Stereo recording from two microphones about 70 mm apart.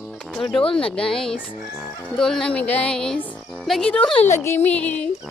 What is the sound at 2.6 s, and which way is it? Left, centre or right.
Music, left.